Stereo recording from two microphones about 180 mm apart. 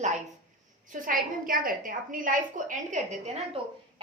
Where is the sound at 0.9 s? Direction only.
50° right (ahead or behind).